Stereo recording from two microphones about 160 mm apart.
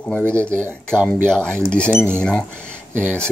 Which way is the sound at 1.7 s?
5° left (ahead or behind).